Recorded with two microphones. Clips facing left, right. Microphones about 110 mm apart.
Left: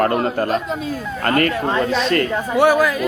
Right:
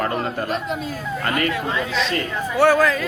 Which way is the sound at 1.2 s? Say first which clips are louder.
Left 5 dB; 50° left (ahead or behind).